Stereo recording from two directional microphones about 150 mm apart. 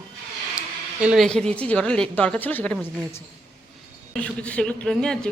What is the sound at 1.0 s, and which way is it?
Speech, centre (ahead or behind).